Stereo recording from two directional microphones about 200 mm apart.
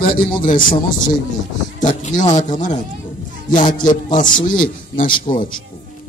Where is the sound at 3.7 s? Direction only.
40° left (ahead or behind).